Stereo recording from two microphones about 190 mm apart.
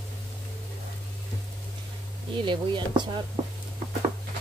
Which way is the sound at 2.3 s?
25° right (ahead or behind).